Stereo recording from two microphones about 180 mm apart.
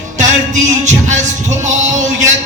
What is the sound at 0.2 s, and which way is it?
Music, 45° right (ahead or behind).